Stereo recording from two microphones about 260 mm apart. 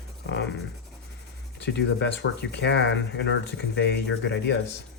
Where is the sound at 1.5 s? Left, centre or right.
Left.